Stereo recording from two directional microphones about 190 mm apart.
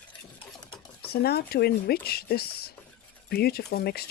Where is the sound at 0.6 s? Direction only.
25° left (ahead or behind).